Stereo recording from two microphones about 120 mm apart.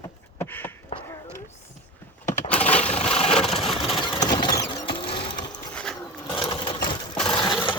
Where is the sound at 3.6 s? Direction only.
Centre (ahead or behind).